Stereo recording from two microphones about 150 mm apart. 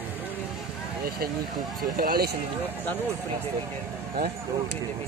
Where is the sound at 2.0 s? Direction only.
90° right.